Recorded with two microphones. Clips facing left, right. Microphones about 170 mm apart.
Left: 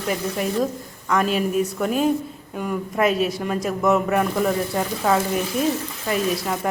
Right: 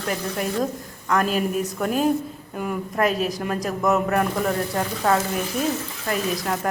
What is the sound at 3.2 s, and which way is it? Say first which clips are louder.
Speech: left 3 dB; 40° right (ahead or behind).